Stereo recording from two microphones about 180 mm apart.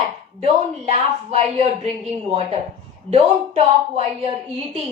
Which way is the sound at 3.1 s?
35° right (ahead or behind).